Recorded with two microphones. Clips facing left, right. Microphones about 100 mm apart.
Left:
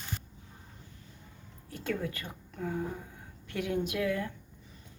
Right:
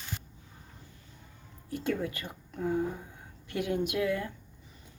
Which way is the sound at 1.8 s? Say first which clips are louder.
Right 2 dB; 20° right (ahead or behind).